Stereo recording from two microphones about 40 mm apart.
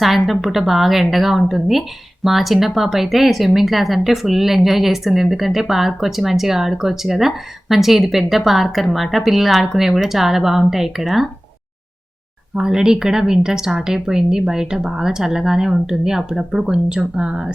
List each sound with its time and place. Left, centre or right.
0.0 s speech: centre
12.5 s speech: centre
16.9 s speech: right